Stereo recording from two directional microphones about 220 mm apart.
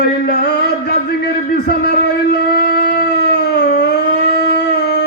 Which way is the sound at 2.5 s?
45° left (ahead or behind).